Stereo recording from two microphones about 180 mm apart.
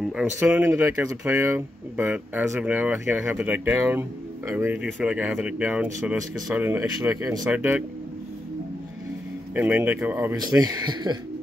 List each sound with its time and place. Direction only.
0.0 s speech: 5° right (ahead or behind)
9.6 s speech: 10° right (ahead or behind)
10.4 s speech: 20° right (ahead or behind)